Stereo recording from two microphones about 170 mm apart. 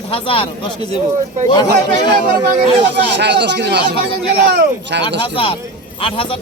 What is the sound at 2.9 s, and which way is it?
Speech, 85° right.